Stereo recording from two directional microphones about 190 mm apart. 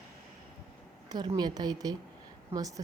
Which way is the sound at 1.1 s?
20° right (ahead or behind).